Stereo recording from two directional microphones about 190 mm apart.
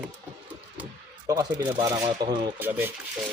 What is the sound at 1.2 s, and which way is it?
Speech, 20° right (ahead or behind).